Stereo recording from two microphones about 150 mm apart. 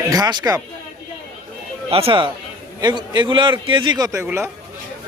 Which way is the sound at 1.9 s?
40° right (ahead or behind).